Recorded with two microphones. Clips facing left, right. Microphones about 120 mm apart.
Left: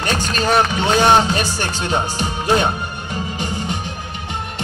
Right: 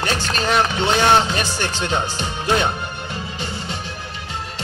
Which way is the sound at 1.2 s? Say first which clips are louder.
Left 2 dB; 40° left (ahead or behind).